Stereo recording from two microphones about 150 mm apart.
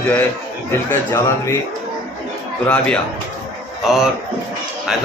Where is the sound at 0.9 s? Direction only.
20° left (ahead or behind).